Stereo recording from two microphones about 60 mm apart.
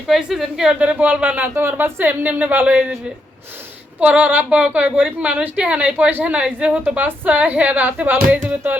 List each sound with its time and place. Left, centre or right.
0.1 s a woman's voice: centre
0.8 s a woman's voice: right
1.5 s speech: right
4.0 s a woman's voice: right